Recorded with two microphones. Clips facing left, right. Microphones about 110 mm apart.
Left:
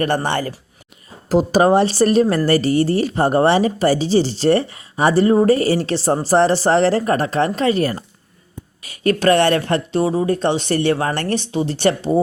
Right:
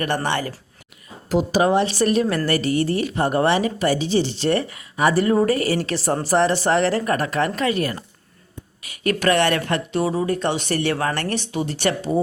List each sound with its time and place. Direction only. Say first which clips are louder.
0.0 s speech: left 4 dB; 35° left (ahead or behind)